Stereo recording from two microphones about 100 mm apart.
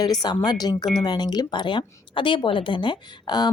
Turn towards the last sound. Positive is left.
turn(degrees=45)  # may be behind; listen again after turning